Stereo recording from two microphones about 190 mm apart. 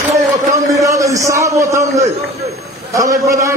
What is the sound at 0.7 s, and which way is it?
A man's voice, 15° right (ahead or behind).